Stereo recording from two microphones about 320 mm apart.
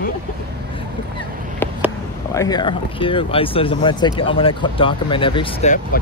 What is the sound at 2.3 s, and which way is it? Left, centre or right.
Speech, centre.